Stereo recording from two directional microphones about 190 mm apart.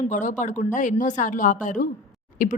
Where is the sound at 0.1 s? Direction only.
40° left (ahead or behind).